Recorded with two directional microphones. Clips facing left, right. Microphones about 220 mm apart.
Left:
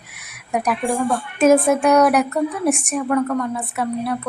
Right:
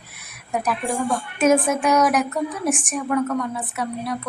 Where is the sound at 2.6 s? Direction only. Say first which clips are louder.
Left 4 dB; 40° left (ahead or behind).